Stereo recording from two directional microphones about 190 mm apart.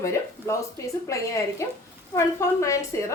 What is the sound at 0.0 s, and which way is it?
A woman's voice, 15° left (ahead or behind).